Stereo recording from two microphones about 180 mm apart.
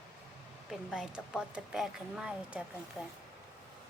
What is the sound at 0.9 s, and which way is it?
A woman's voice, 5° right (ahead or behind).